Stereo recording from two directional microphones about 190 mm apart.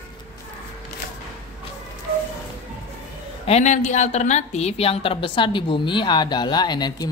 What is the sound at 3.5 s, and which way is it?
A woman's voice, 40° left (ahead or behind).